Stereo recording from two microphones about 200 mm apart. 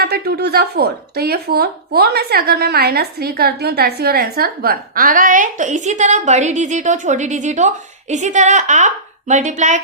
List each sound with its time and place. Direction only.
0.0 s a woman's voice: 55° right (ahead or behind); by 9.8 s 35° right (ahead or behind)